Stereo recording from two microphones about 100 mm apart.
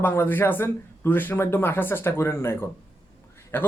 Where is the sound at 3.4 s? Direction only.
25° left (ahead or behind).